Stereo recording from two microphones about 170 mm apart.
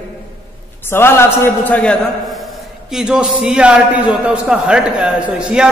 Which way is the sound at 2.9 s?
5° right (ahead or behind).